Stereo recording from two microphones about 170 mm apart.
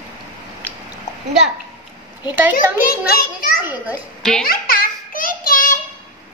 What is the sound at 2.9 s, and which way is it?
Speech, 55° left (ahead or behind).